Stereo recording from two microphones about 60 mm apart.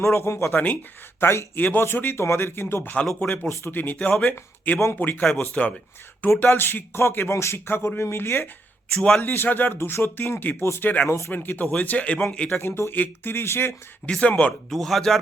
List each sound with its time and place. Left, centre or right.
0.0 s speech: left
0.5 s speech: left
1.2 s speech: left
1.5 s speech: left
3.2 s a man's voice: left
6.5 s speech: left
8.9 s a man's voice: centre
9.2 s a man's voice: left; by 12.5 s centre
12.5 s speech: left
14.1 s a man's voice: left
14.7 s speech: centre